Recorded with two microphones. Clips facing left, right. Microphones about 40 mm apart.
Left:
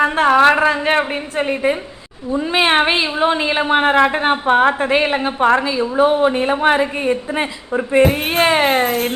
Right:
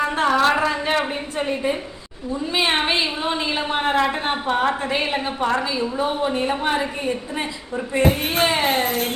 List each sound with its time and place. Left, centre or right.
0.0 s a woman's voice: left